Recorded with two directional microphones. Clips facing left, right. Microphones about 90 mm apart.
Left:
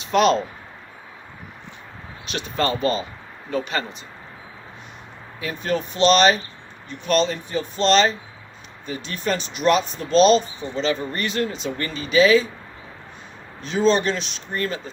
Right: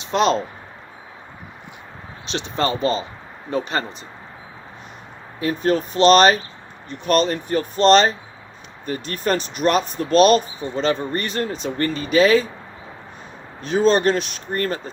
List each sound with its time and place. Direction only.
0.0 s speech: 30° right (ahead or behind)
2.2 s speech: 30° right (ahead or behind)
5.4 s speech: 40° right (ahead or behind)
13.6 s speech: 45° right (ahead or behind)